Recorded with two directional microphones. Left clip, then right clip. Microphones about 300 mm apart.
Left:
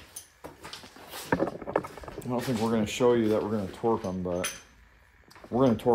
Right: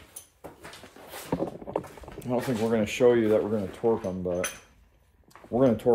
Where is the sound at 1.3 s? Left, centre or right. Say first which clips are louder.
Left 3 dB; right.